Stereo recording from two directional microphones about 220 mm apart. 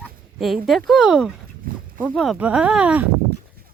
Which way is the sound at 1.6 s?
40° right (ahead or behind).